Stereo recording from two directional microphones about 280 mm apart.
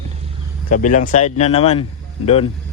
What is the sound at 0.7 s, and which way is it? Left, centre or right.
Speech, left.